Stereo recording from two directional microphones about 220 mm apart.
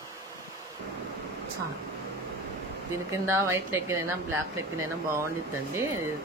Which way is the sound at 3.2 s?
10° right (ahead or behind).